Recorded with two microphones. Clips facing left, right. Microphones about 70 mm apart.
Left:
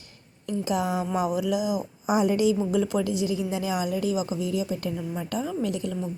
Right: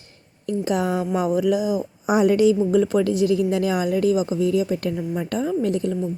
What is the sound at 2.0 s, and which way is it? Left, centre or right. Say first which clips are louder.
A woman's voice: right 5 dB; right.